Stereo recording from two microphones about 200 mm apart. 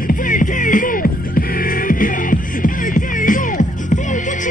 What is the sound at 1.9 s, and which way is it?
Music, 45° left (ahead or behind).